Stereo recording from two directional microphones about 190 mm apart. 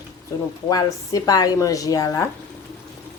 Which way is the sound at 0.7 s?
20° left (ahead or behind).